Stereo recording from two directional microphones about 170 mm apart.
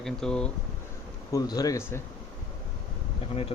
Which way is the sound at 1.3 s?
20° left (ahead or behind).